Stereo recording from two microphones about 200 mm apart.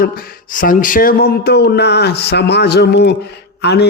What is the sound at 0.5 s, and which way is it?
A man's voice, 40° left (ahead or behind).